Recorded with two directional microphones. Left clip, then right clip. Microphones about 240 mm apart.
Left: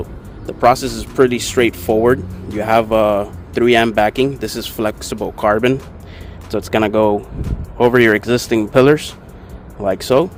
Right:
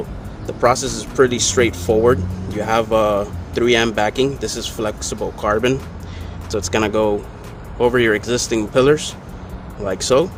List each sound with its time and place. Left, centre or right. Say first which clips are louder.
0.4 s speech: left 3 dB; left